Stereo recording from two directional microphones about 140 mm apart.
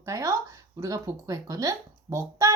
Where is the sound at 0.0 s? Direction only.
20° right (ahead or behind).